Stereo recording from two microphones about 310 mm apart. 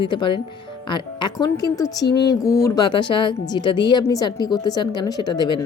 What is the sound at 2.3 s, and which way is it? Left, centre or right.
Speech, centre.